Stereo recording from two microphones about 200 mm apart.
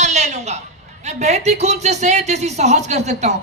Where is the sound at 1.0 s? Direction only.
35° right (ahead or behind).